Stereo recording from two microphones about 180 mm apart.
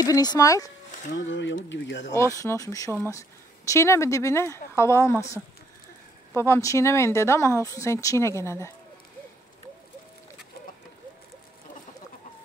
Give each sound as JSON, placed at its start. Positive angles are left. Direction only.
{"t": 0.0, "sound": "speech", "side_deg": 20}
{"t": 1.1, "sound": "speech", "side_deg": 90}
{"t": 2.3, "sound": "speech", "side_deg": 15}